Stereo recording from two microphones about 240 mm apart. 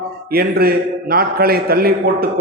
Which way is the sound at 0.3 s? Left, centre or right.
Right.